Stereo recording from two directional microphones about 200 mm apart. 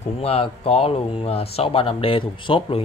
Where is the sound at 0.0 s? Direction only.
30° left (ahead or behind).